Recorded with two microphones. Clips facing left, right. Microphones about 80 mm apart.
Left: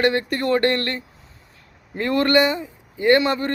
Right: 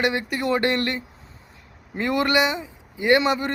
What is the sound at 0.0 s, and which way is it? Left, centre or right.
Speech, centre.